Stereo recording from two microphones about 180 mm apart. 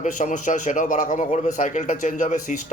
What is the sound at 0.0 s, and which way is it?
A man's voice, 45° left (ahead or behind).